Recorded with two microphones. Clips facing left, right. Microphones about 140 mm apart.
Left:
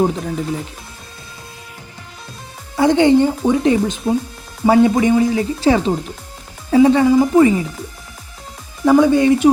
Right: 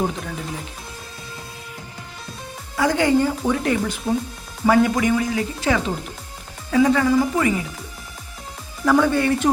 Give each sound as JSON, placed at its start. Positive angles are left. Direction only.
{"t": 2.7, "sound": "speech", "side_deg": 25}
{"t": 8.8, "sound": "speech", "side_deg": 15}